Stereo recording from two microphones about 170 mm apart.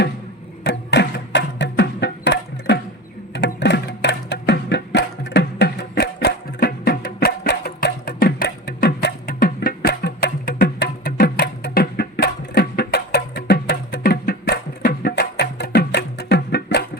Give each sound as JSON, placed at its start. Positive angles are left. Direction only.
{"t": 0.6, "sound": "music", "side_deg": 80}